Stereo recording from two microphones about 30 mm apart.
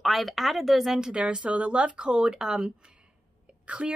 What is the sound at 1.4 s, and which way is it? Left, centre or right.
Speech, right.